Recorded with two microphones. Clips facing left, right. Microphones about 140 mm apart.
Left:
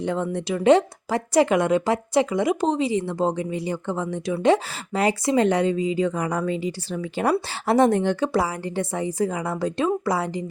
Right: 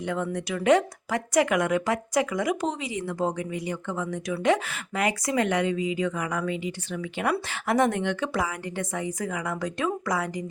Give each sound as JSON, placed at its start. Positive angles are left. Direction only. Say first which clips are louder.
{"t": 0.0, "sound": "speech", "louder": "left 4 dB", "side_deg": 30}